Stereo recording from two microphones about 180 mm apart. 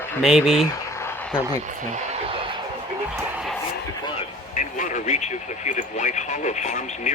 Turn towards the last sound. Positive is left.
turn(degrees=40)  # may be behind; listen again after turning